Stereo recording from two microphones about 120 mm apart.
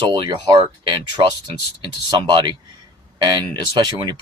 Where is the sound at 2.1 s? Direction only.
40° right (ahead or behind).